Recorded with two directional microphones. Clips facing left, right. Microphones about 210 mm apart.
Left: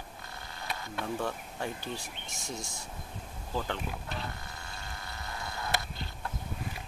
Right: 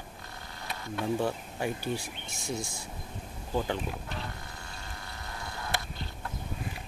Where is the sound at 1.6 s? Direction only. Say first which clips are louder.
Right 5 dB; 10° right (ahead or behind).